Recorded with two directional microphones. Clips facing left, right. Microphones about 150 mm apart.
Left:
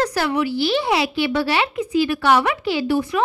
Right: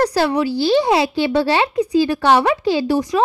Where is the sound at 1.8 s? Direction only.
35° right (ahead or behind).